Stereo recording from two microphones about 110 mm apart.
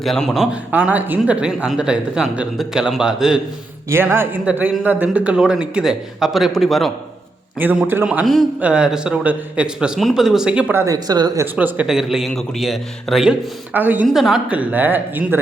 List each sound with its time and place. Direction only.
0.0 s a man's voice: centre (ahead or behind)
0.5 s speech: 15° right (ahead or behind)
3.8 s a man's voice: 20° right (ahead or behind); by 6.9 s centre (ahead or behind)
7.6 s speech: 15° right (ahead or behind)
8.2 s a man's voice: centre (ahead or behind)
10.8 s speech: 35° right (ahead or behind)
11.5 s a man's voice: 10° right (ahead or behind)
13.7 s speech: 15° right (ahead or behind)
14.1 s a man's voice: 5° right (ahead or behind)
14.5 s speech: 15° right (ahead or behind)